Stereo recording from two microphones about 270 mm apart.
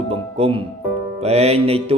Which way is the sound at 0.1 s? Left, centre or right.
Right.